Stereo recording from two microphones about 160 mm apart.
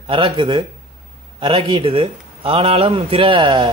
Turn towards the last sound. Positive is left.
turn(degrees=-30)  # may be behind; listen again after turning